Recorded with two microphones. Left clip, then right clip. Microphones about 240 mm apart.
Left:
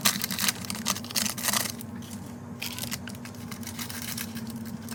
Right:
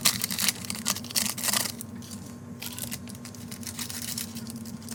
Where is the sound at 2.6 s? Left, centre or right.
Centre.